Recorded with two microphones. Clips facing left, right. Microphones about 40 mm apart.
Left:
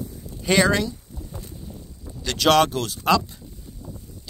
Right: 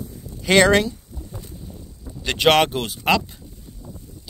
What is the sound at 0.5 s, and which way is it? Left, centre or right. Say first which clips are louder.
Speech: right 4 dB; right.